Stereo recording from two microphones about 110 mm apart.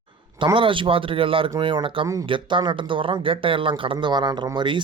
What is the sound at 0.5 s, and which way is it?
Speech, 50° right (ahead or behind).